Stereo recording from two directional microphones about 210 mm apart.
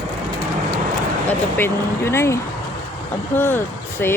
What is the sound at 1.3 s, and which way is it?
Speech, 10° left (ahead or behind).